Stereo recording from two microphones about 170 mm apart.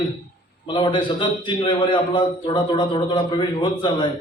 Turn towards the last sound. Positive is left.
turn(degrees=30)  # may be behind; listen again after turning